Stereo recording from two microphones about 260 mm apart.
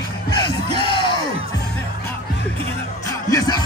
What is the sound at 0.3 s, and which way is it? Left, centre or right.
Music, centre.